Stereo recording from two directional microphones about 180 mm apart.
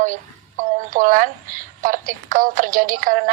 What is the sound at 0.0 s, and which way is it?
A woman's voice, 45° right (ahead or behind).